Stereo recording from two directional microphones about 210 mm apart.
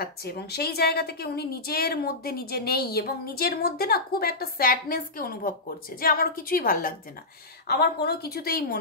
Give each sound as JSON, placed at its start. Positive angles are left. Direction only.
{"t": 0.0, "sound": "a woman's voice", "side_deg": 50}